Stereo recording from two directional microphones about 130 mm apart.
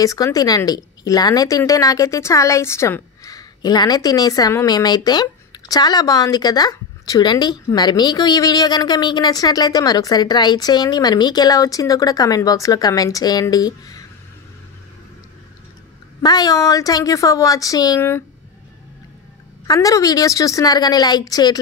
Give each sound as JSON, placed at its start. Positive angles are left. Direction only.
{"t": 0.0, "sound": "a woman's voice", "side_deg": 25}
{"t": 16.2, "sound": "a woman's voice", "side_deg": 30}
{"t": 19.7, "sound": "a woman's voice", "side_deg": 25}